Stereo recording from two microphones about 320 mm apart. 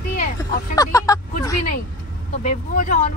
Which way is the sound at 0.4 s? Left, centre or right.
Centre.